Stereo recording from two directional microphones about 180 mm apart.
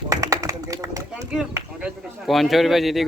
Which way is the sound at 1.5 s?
5° right (ahead or behind).